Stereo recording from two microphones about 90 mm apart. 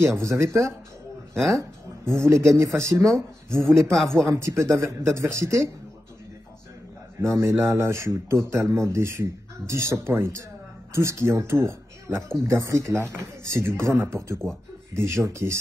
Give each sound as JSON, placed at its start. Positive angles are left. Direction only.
{"t": 0.0, "sound": "speech", "side_deg": -30}
{"t": 1.3, "sound": "speech", "side_deg": 5}
{"t": 1.6, "sound": "speech", "side_deg": -30}
{"t": 7.2, "sound": "speech", "side_deg": -35}